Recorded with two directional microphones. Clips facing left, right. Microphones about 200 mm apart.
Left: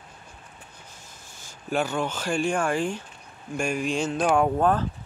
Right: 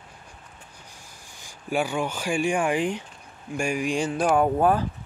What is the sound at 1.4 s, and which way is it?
Speech, 10° right (ahead or behind).